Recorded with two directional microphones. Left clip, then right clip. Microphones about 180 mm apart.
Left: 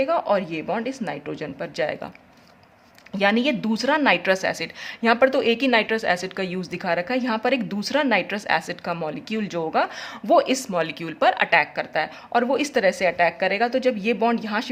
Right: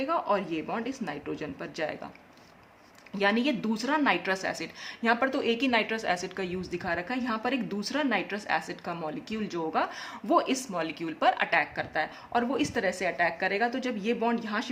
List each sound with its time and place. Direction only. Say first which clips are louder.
0.0 s a woman's voice: left 7 dB; 30° left (ahead or behind)
3.2 s a woman's voice: left 6 dB; 35° left (ahead or behind)